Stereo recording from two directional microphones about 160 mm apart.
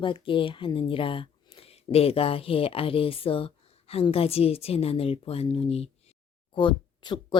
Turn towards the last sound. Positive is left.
turn(degrees=30)  # may be behind; listen again after turning